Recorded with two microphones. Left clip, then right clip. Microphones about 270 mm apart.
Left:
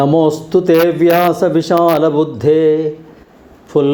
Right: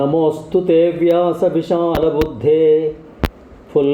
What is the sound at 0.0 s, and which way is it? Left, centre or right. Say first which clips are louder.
A man's voice: left 4 dB; centre.